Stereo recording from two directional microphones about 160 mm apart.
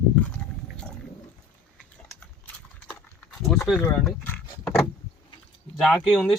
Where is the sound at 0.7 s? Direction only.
5° left (ahead or behind).